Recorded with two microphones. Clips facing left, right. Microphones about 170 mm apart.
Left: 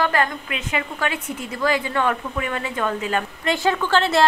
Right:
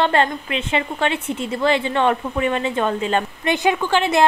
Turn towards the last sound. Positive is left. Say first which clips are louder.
# right 1 dB
turn(degrees=-15)  # may be behind; listen again after turning